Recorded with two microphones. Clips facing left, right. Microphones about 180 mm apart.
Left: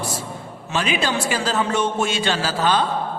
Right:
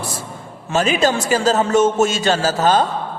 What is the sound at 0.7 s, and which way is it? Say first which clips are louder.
A man's voice: right 6 dB; 45° right (ahead or behind).